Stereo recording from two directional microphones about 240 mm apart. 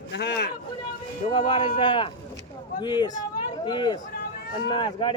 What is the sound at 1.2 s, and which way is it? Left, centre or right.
Speech, left.